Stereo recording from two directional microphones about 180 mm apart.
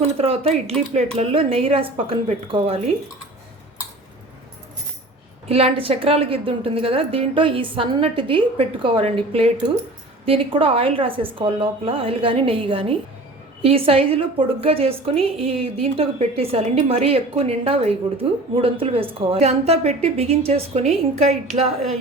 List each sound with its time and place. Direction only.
0.0 s a woman's voice: 35° right (ahead or behind)
5.5 s a woman's voice: 35° right (ahead or behind)